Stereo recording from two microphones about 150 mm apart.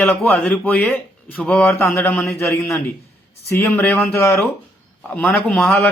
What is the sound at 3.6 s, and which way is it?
Speech, 15° left (ahead or behind).